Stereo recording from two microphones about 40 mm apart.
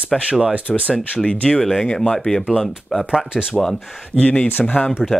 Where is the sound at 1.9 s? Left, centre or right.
Centre.